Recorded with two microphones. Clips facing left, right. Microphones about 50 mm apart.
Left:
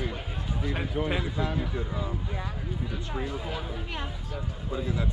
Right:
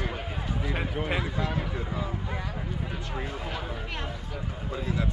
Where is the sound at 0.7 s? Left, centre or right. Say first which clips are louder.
Left 1 dB; right.